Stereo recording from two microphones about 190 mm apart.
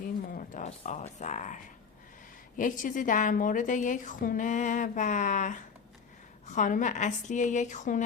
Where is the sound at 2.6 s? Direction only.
45° left (ahead or behind).